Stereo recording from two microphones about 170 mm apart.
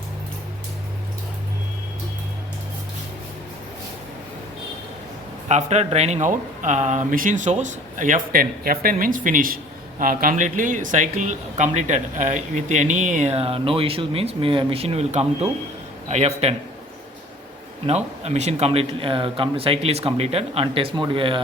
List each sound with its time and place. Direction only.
5.5 s speech: 40° right (ahead or behind)
17.8 s speech: 40° right (ahead or behind)